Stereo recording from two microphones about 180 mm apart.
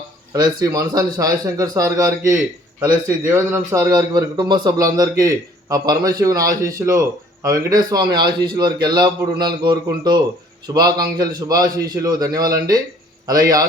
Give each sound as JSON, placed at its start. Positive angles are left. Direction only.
{"t": 0.3, "sound": "a man's voice", "side_deg": -20}